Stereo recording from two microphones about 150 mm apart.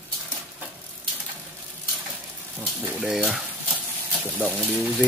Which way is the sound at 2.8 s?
Centre (ahead or behind).